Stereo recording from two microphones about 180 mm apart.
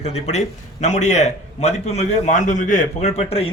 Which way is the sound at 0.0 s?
35° left (ahead or behind).